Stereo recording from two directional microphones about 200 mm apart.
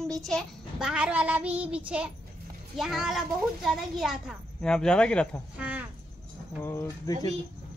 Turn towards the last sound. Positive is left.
turn(degrees=15)  # may be behind; listen again after turning